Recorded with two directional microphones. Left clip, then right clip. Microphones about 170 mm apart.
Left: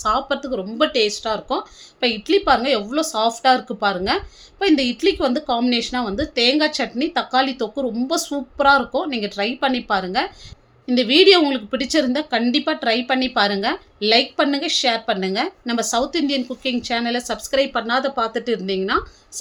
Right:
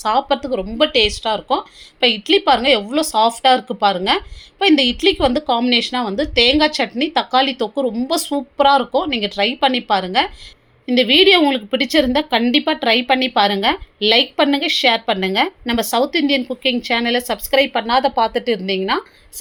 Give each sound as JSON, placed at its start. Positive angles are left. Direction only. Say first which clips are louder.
{"t": 0.0, "sound": "speech", "louder": "right 3 dB", "side_deg": -15}